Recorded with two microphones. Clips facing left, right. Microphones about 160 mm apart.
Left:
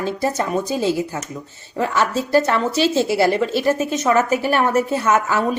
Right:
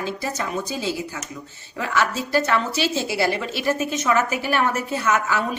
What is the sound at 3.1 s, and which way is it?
Speech, 50° left (ahead or behind).